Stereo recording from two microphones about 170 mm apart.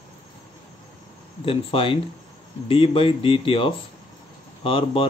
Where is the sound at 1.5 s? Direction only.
30° left (ahead or behind).